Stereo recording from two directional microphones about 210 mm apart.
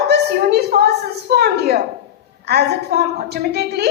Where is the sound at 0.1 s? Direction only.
50° right (ahead or behind).